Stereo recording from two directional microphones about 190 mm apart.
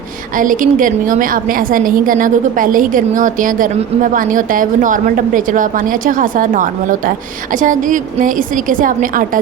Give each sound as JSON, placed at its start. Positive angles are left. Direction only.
{"t": 0.3, "sound": "a woman's voice", "side_deg": -45}